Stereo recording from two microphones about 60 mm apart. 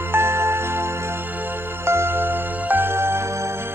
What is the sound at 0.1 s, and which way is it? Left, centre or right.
Music, right.